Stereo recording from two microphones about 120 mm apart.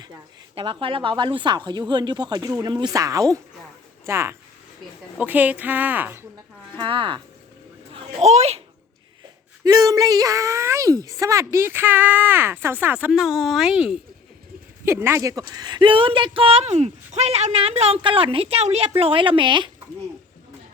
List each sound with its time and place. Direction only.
0.5 s a woman's voice: 50° right (ahead or behind); by 6.2 s 15° right (ahead or behind)
6.7 s speech: 45° right (ahead or behind)
8.2 s a child's voice: 65° right (ahead or behind)
9.6 s speech: 30° right (ahead or behind); by 13.1 s 15° right (ahead or behind)
13.1 s speech: 5° right (ahead or behind)
14.8 s speech: 20° right (ahead or behind); by 19.7 s 45° right (ahead or behind)